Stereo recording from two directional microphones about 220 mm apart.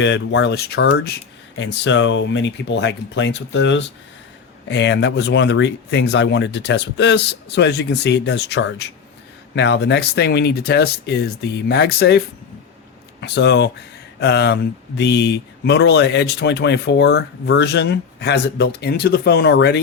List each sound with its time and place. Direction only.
0.0 s speech: 55° left (ahead or behind)